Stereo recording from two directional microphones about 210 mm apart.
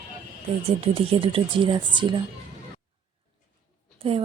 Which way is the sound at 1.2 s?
25° right (ahead or behind).